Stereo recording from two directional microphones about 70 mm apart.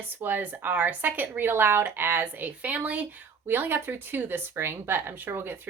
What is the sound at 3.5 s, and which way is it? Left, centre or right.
Speech, right.